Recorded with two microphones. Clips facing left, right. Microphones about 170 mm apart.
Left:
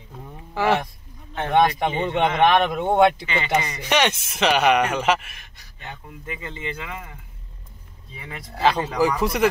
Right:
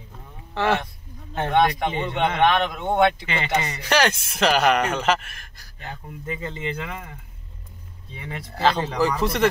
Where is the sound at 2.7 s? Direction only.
30° left (ahead or behind).